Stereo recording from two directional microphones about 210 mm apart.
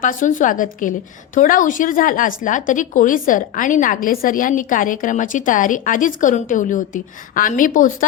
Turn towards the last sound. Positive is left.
turn(degrees=40)  # may be behind; listen again after turning